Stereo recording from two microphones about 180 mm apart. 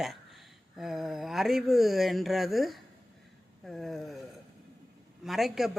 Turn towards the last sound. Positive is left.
turn(degrees=0)  # may be behind; listen again after turning